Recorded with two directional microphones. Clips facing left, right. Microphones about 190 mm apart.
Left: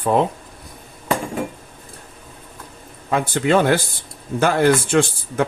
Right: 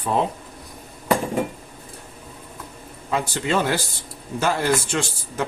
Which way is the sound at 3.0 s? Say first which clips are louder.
Left 5 dB; 55° left (ahead or behind).